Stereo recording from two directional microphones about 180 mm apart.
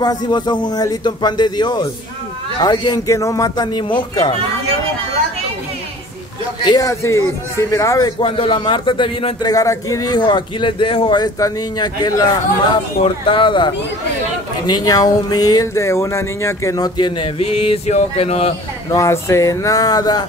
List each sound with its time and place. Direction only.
0.0 s a man's voice: 20° left (ahead or behind)
6.6 s a man's voice: 20° left (ahead or behind)
8.2 s a man's voice: 30° left (ahead or behind)
14.7 s a man's voice: 20° left (ahead or behind)
18.9 s a man's voice: 15° left (ahead or behind)